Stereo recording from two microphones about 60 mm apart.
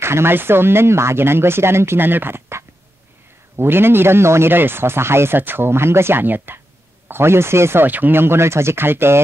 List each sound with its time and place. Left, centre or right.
0.0 s speech: right
7.8 s speech: right